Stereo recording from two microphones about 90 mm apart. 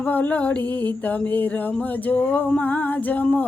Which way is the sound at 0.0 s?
20° left (ahead or behind).